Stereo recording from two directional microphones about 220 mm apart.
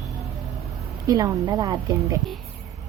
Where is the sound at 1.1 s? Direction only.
15° right (ahead or behind).